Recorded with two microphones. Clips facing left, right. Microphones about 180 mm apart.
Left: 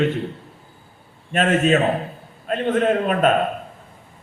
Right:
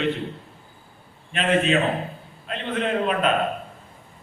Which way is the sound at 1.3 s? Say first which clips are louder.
Left 4 dB; 45° left (ahead or behind).